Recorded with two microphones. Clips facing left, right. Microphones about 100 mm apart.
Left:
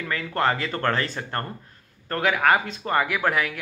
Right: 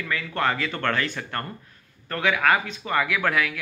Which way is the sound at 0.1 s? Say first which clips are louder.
Left 2 dB; 35° left (ahead or behind).